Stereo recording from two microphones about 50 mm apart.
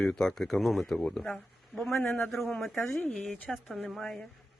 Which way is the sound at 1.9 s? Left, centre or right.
Left.